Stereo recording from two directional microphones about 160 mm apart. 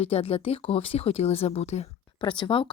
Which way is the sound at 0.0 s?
35° left (ahead or behind).